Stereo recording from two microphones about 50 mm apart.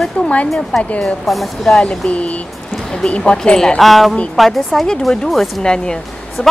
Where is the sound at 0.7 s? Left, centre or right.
Centre.